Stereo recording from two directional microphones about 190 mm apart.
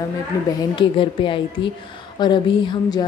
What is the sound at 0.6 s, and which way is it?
A woman's voice, 25° left (ahead or behind).